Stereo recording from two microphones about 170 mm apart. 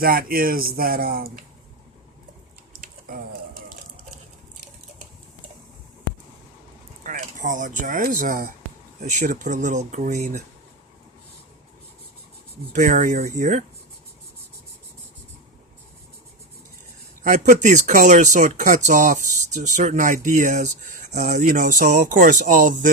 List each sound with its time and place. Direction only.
0.0 s speech: 60° right (ahead or behind)
7.0 s speech: 50° right (ahead or behind)
9.0 s speech: 45° right (ahead or behind)
12.7 s speech: 45° right (ahead or behind)
17.2 s speech: 45° right (ahead or behind)